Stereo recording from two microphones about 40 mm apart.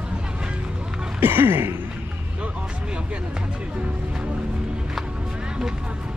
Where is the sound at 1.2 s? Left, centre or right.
Right.